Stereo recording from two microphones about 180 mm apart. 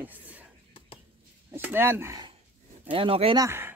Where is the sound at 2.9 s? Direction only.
30° right (ahead or behind).